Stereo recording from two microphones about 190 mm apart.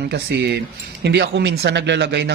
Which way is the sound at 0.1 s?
60° right (ahead or behind).